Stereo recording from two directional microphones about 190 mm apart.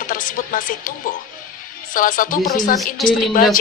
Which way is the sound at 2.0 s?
45° left (ahead or behind).